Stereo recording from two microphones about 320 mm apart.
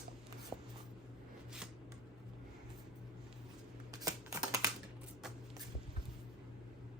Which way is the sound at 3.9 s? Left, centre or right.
Centre.